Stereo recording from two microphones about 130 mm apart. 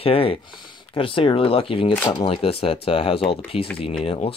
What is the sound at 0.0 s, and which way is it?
Speech, 45° left (ahead or behind).